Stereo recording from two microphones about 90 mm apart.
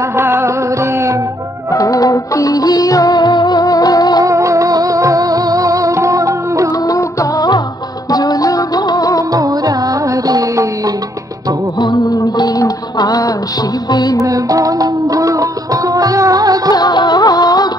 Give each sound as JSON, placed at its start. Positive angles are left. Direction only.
{"t": 0.1, "sound": "music", "side_deg": -30}
{"t": 1.7, "sound": "music of bollywood", "side_deg": 40}
{"t": 4.2, "sound": "music", "side_deg": -35}
{"t": 6.9, "sound": "music", "side_deg": 40}
{"t": 9.3, "sound": "music", "side_deg": -45}
{"t": 11.8, "sound": "music", "side_deg": 55}
{"t": 14.2, "sound": "music", "side_deg": -40}
{"t": 16.7, "sound": "music of bollywood", "side_deg": 50}